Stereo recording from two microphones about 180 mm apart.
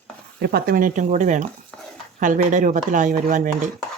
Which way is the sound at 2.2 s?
45° right (ahead or behind).